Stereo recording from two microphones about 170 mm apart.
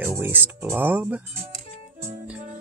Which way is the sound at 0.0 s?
10° right (ahead or behind).